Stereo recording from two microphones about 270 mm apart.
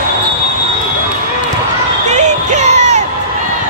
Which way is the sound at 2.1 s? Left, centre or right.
Right.